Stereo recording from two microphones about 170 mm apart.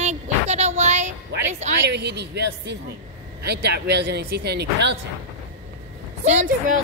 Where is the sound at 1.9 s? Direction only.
80° right.